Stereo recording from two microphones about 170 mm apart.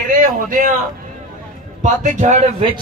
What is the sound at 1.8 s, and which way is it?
Speech, 45° right (ahead or behind).